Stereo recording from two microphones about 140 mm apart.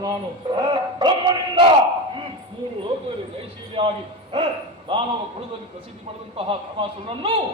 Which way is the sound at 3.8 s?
40° right (ahead or behind).